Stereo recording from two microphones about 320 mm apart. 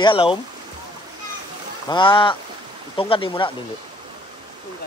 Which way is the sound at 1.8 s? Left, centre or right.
Centre.